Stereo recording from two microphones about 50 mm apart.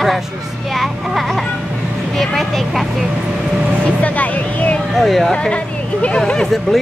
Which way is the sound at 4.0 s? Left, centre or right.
Left.